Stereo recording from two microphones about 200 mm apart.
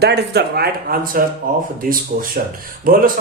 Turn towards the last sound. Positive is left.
turn(degrees=-45)  # may be behind; listen again after turning